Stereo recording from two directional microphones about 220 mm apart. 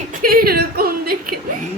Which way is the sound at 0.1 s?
40° right (ahead or behind).